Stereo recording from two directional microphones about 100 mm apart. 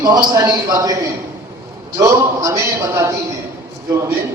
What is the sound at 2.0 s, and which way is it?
Speech, 30° right (ahead or behind).